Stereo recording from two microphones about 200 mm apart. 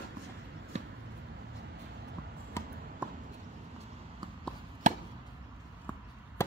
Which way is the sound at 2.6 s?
15° left (ahead or behind).